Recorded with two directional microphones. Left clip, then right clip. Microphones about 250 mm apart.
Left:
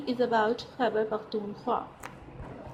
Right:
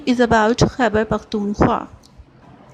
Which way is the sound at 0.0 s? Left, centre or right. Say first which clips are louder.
Right 11 dB; right.